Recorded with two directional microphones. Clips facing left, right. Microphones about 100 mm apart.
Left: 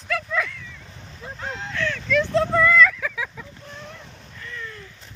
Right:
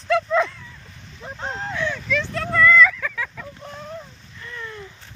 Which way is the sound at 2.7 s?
Centre (ahead or behind).